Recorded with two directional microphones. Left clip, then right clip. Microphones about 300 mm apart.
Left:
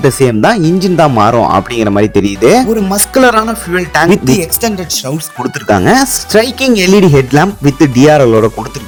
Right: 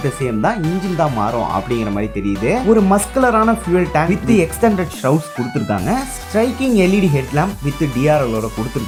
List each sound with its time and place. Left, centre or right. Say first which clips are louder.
0.2 s speech: left 9 dB; left
5.6 s speech: left 14 dB; left